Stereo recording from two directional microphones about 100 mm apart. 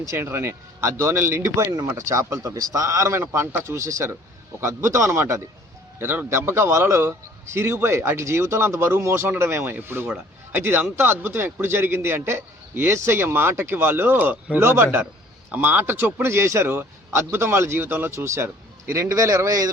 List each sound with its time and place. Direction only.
0.2 s a man's voice: 25° right (ahead or behind)
14.6 s a man's voice: 25° right (ahead or behind)